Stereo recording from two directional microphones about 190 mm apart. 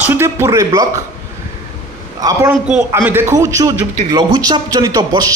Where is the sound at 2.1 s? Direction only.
20° right (ahead or behind).